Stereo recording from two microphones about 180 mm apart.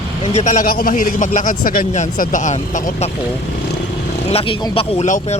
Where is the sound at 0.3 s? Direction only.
45° left (ahead or behind).